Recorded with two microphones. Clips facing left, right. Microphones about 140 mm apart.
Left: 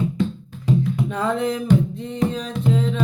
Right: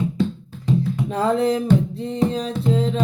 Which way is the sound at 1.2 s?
35° right (ahead or behind).